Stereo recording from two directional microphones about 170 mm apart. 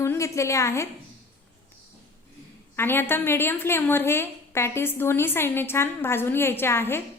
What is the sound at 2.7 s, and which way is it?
A woman's voice, 15° left (ahead or behind).